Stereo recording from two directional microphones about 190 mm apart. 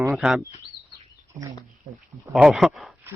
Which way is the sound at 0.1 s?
Centre (ahead or behind).